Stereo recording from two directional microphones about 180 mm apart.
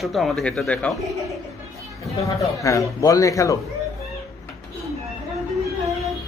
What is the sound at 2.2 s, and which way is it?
A man's voice, 15° left (ahead or behind).